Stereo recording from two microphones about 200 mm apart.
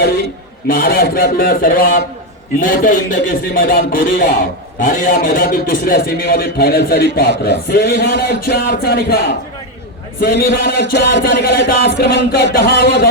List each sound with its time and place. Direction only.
0.7 s a man's voice: 45° left (ahead or behind)